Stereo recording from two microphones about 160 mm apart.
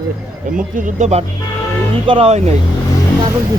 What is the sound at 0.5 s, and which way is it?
Speech, 55° right (ahead or behind).